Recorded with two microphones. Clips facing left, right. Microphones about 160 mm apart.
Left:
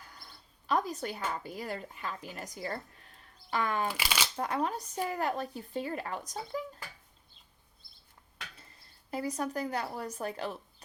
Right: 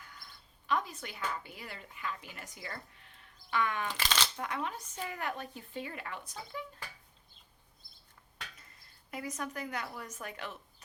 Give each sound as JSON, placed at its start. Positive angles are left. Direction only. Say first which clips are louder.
{"t": 0.0, "sound": "a sound", "louder": "left 1 dB", "side_deg": 35}
{"t": 0.7, "sound": "speech", "louder": "left 4 dB", "side_deg": 40}
{"t": 3.8, "sound": "speech", "louder": "left 1 dB", "side_deg": 10}
{"t": 4.4, "sound": "speech", "louder": "left 5 dB", "side_deg": 35}
{"t": 8.5, "sound": "speech", "louder": "left 3 dB", "side_deg": 30}